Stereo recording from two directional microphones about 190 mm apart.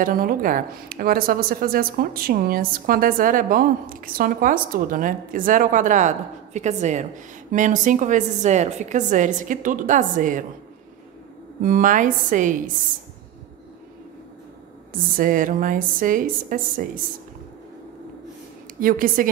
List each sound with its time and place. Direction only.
0.0 s a woman's voice: 50° right (ahead or behind)
11.6 s speech: 45° right (ahead or behind)
14.9 s speech: 45° right (ahead or behind)
18.8 s speech: 45° right (ahead or behind)